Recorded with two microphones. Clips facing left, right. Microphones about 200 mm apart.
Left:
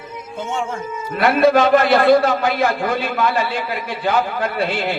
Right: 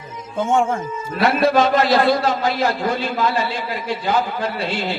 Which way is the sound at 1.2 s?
55° left (ahead or behind).